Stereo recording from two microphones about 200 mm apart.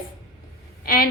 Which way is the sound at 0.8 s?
45° left (ahead or behind).